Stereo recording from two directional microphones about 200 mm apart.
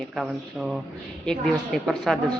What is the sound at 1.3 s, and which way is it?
Speech, centre (ahead or behind).